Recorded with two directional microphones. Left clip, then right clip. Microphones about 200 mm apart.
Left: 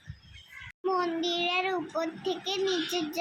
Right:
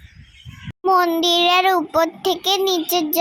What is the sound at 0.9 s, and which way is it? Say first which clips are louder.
A child's voice: right 13 dB; 45° right (ahead or behind).